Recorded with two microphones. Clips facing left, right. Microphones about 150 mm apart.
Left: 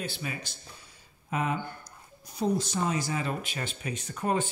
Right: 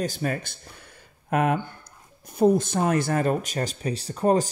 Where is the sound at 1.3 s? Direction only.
60° right (ahead or behind).